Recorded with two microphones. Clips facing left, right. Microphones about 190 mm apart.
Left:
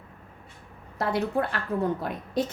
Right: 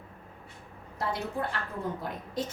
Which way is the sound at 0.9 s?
65° left (ahead or behind).